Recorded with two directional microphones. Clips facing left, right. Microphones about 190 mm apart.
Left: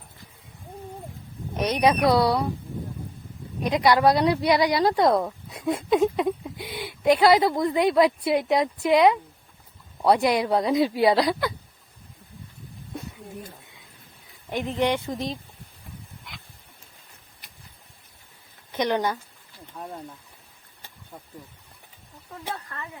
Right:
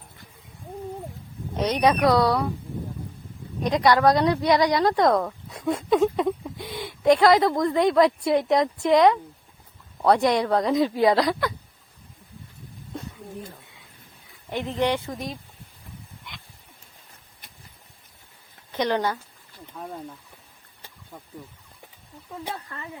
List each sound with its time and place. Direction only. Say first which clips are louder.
1.6 s speech: even; 15° left (ahead or behind)
3.6 s speech: even; 10° left (ahead or behind)
14.8 s speech: even; 20° left (ahead or behind)
18.7 s speech: even; 15° left (ahead or behind)
22.4 s speech: left 2 dB; 20° right (ahead or behind)